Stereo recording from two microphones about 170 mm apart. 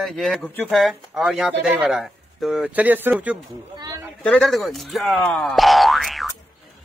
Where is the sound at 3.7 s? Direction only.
20° right (ahead or behind).